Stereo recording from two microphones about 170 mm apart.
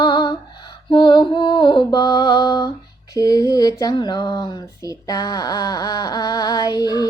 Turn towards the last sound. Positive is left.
turn(degrees=25)  # may be behind; listen again after turning